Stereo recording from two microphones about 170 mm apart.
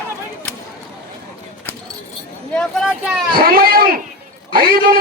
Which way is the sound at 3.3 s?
60° right (ahead or behind).